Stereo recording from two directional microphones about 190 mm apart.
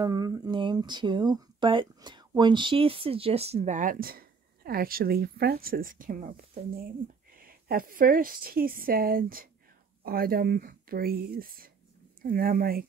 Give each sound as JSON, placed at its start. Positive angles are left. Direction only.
{"t": 0.0, "sound": "a woman's voice", "side_deg": -20}